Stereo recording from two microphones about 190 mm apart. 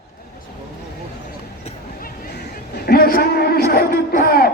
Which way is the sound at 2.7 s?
55° left (ahead or behind).